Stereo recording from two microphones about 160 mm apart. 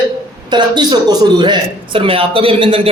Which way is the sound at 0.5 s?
25° right (ahead or behind).